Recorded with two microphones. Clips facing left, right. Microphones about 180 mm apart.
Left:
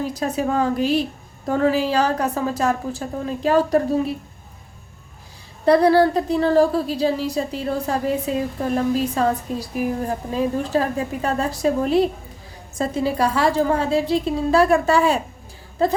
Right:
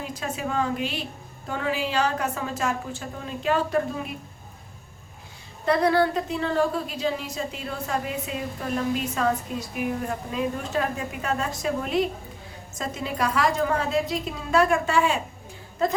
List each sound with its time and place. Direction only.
0.0 s a woman's voice: 40° left (ahead or behind)
5.6 s a woman's voice: 35° left (ahead or behind)